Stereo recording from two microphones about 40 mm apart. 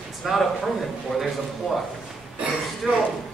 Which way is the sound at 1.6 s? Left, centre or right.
Left.